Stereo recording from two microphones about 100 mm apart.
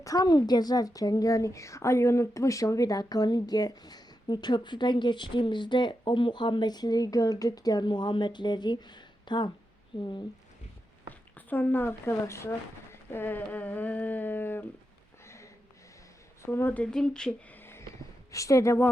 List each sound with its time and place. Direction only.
0.0 s a woman's voice: 35° left (ahead or behind)
11.1 s speech: 15° left (ahead or behind)
15.2 s a sound: 30° left (ahead or behind)
16.5 s speech: 20° left (ahead or behind)
17.6 s a sound: 25° left (ahead or behind)
18.3 s speech: 35° left (ahead or behind)